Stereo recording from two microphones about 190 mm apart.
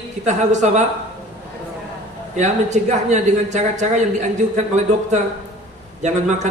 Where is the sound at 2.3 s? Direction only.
40° right (ahead or behind).